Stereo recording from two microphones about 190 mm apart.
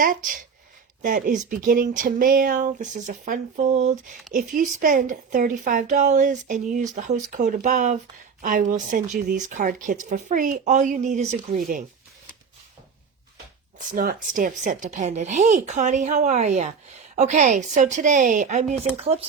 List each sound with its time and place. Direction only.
0.0 s speech: 45° right (ahead or behind)
4.3 s a woman's voice: 50° right (ahead or behind)
13.7 s a woman's voice: 45° right (ahead or behind)